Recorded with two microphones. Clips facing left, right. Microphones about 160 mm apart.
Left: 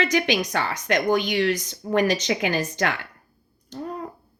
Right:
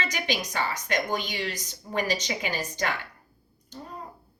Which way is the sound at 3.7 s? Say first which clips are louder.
Left 9 dB; 65° left (ahead or behind).